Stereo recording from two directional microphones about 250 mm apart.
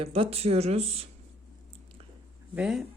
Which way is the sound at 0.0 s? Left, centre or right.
Right.